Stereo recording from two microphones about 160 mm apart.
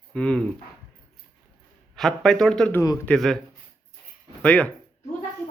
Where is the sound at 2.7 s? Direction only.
20° left (ahead or behind).